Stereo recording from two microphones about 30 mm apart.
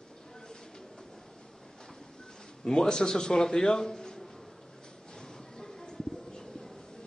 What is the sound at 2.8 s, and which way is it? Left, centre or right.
A man's voice, centre.